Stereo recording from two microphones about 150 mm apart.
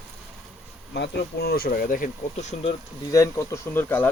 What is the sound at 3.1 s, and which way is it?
Speech, 20° left (ahead or behind).